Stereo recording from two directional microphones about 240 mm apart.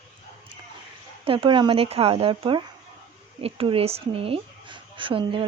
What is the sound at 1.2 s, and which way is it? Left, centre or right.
Speech, right.